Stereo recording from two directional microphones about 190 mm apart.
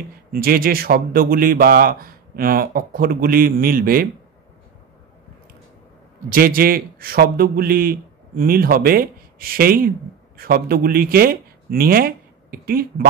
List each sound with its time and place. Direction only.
0.3 s speech: 50° right (ahead or behind)
6.2 s speech: 50° right (ahead or behind)